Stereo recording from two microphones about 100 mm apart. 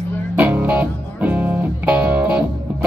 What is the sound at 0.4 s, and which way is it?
Music, 15° right (ahead or behind).